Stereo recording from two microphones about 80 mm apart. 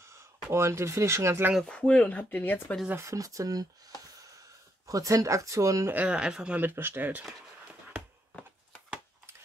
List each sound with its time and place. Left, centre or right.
0.0 s speech: right
1.6 s speech: centre
3.0 s speech: right
4.8 s speech: right
6.0 s speech: centre
6.6 s speech: right